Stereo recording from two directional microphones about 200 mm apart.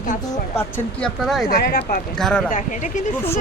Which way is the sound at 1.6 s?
50° left (ahead or behind).